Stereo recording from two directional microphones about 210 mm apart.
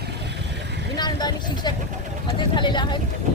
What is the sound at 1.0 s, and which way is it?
Vehicle, 20° left (ahead or behind).